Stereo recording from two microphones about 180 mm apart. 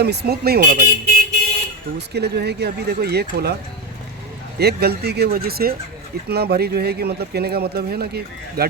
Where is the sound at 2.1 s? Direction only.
65° right (ahead or behind).